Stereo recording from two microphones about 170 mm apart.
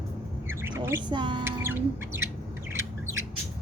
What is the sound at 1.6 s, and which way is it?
Speech, 15° right (ahead or behind).